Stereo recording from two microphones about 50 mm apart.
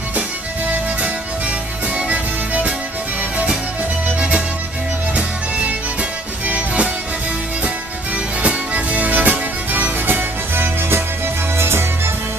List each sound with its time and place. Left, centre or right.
2.0 s music: right
5.1 s music: right
8.4 s music: right